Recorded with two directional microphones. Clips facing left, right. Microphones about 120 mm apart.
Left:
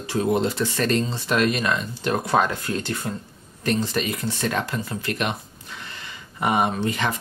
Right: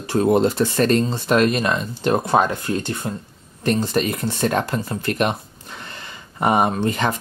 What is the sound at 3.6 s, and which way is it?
Speech, 45° right (ahead or behind).